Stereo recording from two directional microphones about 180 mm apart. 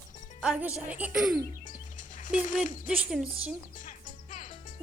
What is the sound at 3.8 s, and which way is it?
Music, 45° left (ahead or behind).